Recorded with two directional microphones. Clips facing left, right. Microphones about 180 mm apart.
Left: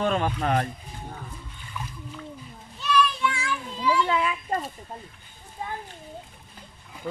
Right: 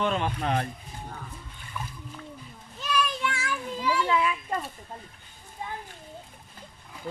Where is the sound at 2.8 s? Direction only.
45° right (ahead or behind).